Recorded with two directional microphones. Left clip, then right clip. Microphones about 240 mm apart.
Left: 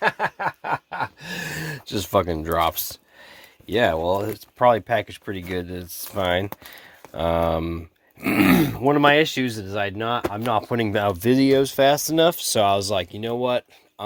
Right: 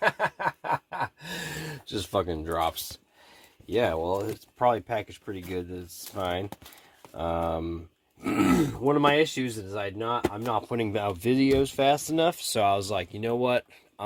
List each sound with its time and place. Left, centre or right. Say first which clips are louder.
0.0 s a sound: left 3 dB; left
3.7 s speech: left 6 dB; left
13.2 s speech: even; centre